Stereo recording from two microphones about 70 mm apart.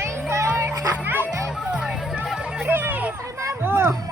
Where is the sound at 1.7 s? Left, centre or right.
Centre.